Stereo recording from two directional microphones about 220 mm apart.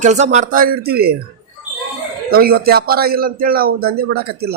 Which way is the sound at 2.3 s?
45° right (ahead or behind).